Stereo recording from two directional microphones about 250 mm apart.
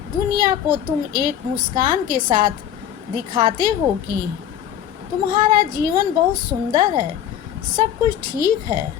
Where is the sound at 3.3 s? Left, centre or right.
Centre.